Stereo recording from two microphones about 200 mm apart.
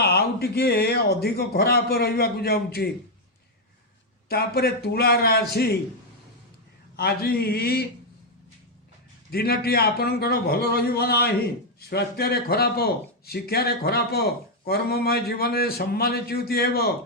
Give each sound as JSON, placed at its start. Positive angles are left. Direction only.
{"t": 0.0, "sound": "a man's voice", "side_deg": 50}
{"t": 4.3, "sound": "a man's voice", "side_deg": 50}
{"t": 6.9, "sound": "a man's voice", "side_deg": 50}
{"t": 9.3, "sound": "a man's voice", "side_deg": 50}